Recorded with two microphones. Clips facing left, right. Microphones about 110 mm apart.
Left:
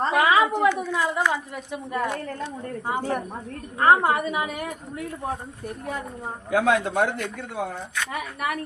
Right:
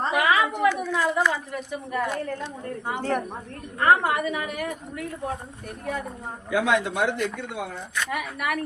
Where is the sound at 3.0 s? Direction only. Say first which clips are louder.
Right 4 dB; 10° left (ahead or behind).